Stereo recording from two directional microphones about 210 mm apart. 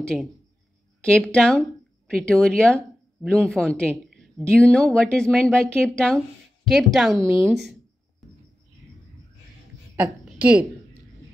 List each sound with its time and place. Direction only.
0.0 s speech: 5° left (ahead or behind)
9.9 s a woman's voice: 5° right (ahead or behind)